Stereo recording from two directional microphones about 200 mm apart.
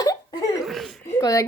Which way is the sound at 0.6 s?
Centre (ahead or behind).